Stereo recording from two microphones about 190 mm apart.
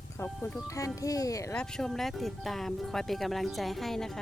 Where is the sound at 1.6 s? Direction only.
5° left (ahead or behind).